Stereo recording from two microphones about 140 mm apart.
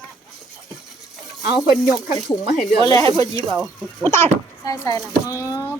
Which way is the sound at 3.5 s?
Centre (ahead or behind).